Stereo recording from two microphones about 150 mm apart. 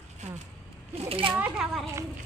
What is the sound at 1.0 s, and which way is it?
Speech, 40° right (ahead or behind).